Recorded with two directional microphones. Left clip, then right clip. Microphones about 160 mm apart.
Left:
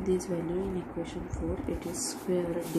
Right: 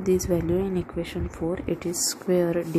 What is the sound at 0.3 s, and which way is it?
Speech, 65° right (ahead or behind).